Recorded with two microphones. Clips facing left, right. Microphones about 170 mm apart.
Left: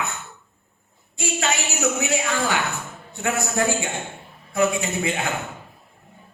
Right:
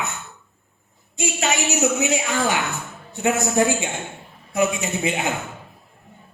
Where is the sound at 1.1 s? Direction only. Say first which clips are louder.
Right 2 dB; 20° right (ahead or behind).